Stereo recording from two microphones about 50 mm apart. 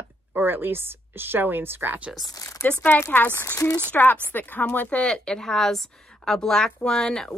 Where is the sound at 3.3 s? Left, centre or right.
Left.